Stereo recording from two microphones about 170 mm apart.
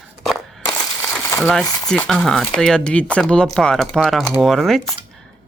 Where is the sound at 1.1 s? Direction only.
10° left (ahead or behind).